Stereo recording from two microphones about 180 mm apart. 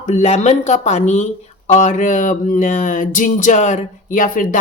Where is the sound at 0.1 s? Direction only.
40° left (ahead or behind).